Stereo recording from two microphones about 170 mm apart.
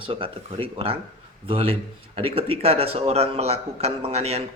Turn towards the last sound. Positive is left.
turn(degrees=-40)  # may be behind; listen again after turning